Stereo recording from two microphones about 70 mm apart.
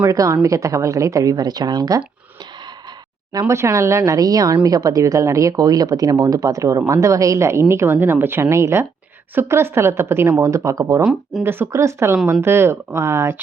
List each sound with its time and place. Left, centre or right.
0.1 s speech: right
3.5 s a woman's voice: right
11.0 s speech: centre
11.4 s a woman's voice: right